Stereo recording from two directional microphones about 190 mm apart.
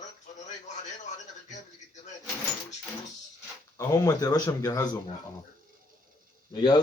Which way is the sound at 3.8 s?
20° left (ahead or behind).